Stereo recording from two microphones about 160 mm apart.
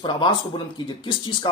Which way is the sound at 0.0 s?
30° left (ahead or behind).